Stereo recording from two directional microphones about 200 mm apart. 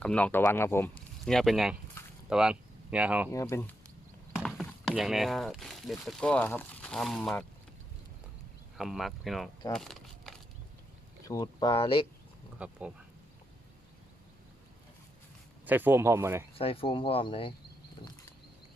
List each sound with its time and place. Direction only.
0.0 s speech: 5° left (ahead or behind)
3.2 s speech: 15° left (ahead or behind)
4.4 s speech: centre (ahead or behind)
8.8 s speech: centre (ahead or behind)
9.7 s a sound: centre (ahead or behind)
11.3 s speech: 20° left (ahead or behind)
12.5 s speech: 5° right (ahead or behind)
15.6 s speech: 10° right (ahead or behind)
16.6 s speech: 30° left (ahead or behind)